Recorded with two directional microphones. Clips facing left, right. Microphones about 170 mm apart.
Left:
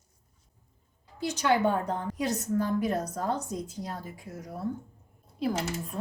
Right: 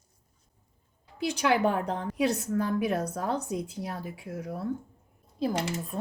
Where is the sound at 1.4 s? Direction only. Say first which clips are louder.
Even; 90° right.